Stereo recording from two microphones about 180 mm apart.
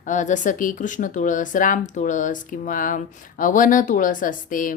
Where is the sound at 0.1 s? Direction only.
45° left (ahead or behind).